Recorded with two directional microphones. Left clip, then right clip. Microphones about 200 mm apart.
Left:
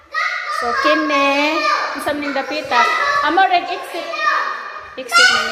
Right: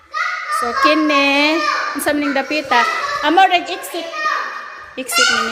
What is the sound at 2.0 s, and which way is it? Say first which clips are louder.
Speech: right 3 dB; 50° right (ahead or behind).